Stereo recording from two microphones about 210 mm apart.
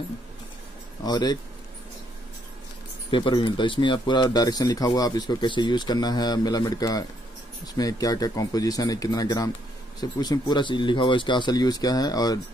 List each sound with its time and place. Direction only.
1.0 s speech: 20° left (ahead or behind)
3.1 s speech: 20° left (ahead or behind)